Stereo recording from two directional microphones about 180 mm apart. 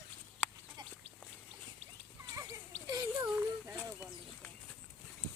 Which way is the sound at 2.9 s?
20° right (ahead or behind).